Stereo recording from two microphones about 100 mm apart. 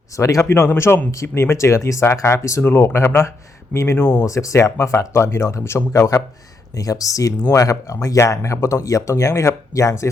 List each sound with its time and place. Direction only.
0.2 s speech: 30° left (ahead or behind)
4.3 s speech: 30° left (ahead or behind)